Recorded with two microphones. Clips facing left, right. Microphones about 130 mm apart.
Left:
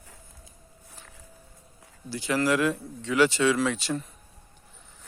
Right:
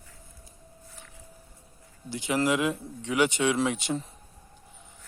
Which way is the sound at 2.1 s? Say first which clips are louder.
Left 1 dB; 20° right (ahead or behind).